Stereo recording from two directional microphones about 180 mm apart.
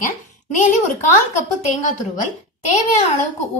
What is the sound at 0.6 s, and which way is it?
Speech, 45° left (ahead or behind).